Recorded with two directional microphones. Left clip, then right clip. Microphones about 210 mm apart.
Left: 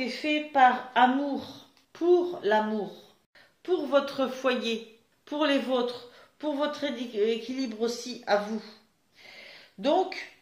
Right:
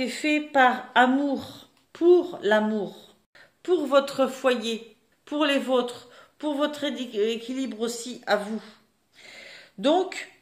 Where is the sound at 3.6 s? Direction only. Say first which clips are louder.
Right 4 dB; 55° right (ahead or behind); by 8.7 s 35° right (ahead or behind).